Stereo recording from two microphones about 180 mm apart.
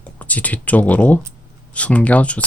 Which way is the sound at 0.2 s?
10° left (ahead or behind).